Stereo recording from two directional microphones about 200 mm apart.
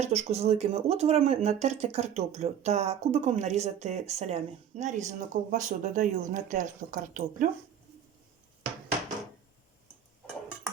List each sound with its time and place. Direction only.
0.0 s speech: 35° right (ahead or behind)